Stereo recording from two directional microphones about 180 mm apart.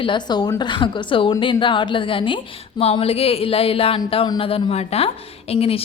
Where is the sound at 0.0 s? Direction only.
25° left (ahead or behind).